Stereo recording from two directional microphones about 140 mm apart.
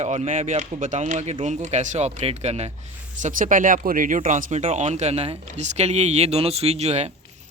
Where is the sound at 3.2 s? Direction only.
70° right (ahead or behind).